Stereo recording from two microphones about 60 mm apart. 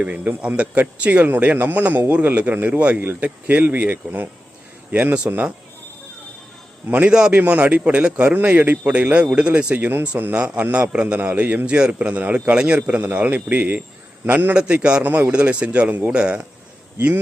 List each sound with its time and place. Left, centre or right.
0.0 s a man's voice: right
6.8 s a man's voice: right
7.1 s a man's voice: centre
7.3 s a man's voice: right
14.3 s a man's voice: right
14.5 s a man's voice: centre